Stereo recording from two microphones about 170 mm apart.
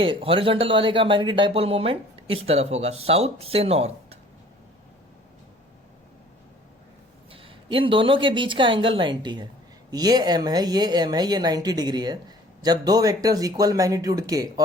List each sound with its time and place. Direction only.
0.0 s speech: 30° right (ahead or behind)
7.3 s a woman's voice: 30° right (ahead or behind)